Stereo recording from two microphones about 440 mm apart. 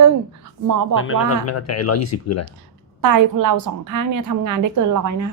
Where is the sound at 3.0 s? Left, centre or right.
Right.